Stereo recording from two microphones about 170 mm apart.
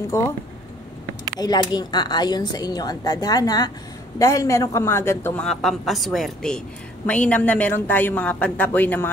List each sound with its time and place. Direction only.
0.1 s a man's voice: 15° left (ahead or behind)
1.4 s a woman's voice: 25° left (ahead or behind)